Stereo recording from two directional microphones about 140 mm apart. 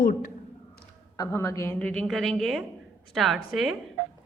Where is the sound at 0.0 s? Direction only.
70° left (ahead or behind).